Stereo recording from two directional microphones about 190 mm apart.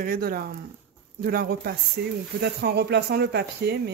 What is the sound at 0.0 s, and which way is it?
Speech, 50° right (ahead or behind).